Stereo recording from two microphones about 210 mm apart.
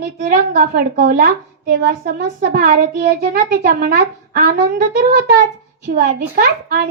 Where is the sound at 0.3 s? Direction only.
40° right (ahead or behind).